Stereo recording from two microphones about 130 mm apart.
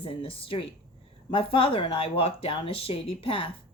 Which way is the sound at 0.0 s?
45° left (ahead or behind).